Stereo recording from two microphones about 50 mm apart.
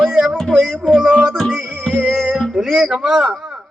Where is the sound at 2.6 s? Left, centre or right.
Centre.